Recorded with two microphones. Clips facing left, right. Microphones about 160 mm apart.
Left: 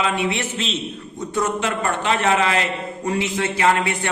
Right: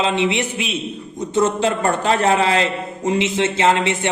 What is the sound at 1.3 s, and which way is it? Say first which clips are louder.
A man's voice: right 5 dB; 30° right (ahead or behind).